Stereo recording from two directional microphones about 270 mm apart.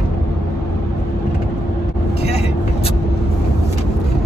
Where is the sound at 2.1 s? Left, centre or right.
Left.